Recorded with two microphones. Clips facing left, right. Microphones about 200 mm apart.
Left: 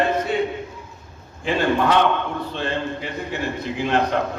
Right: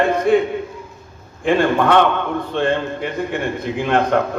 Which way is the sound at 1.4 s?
50° right (ahead or behind).